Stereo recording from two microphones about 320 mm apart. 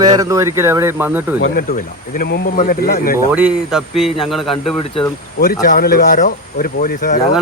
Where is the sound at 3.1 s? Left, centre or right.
Centre.